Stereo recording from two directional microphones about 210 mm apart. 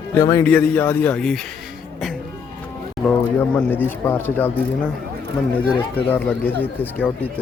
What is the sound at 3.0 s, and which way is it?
Speech, 5° left (ahead or behind).